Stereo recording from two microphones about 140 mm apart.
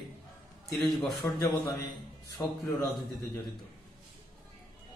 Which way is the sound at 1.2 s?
10° left (ahead or behind).